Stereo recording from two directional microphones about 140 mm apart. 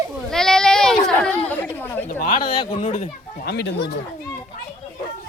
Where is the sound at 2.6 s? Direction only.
40° left (ahead or behind).